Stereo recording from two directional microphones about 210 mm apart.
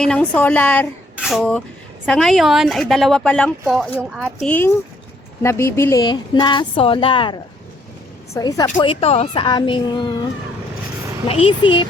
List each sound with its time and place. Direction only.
0.0 s a woman's voice: 5° left (ahead or behind); by 10.2 s 20° left (ahead or behind)
11.3 s a woman's voice: 25° left (ahead or behind)